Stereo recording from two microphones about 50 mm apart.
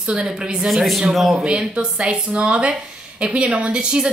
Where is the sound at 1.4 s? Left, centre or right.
Centre.